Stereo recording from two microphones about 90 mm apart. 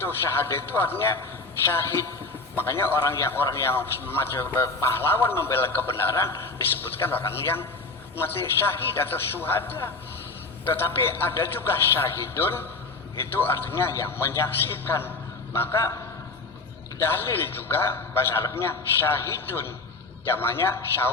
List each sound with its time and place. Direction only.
0.0 s a man's voice: 25° left (ahead or behind)
17.0 s a man's voice: 25° left (ahead or behind)